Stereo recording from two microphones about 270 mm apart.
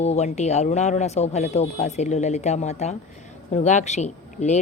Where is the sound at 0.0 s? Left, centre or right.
Left.